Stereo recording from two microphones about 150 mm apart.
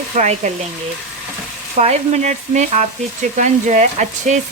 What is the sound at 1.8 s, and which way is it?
Speech, 45° right (ahead or behind).